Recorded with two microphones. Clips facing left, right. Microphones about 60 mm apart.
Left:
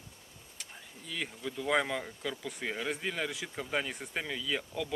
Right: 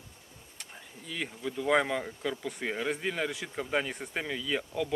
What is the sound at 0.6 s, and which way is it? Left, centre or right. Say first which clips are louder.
Speech: right 2 dB; centre.